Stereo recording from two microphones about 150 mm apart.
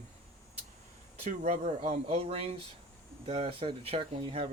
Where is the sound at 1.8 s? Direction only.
40° right (ahead or behind).